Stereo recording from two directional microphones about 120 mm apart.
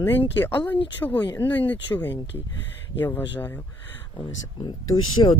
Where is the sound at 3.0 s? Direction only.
15° left (ahead or behind).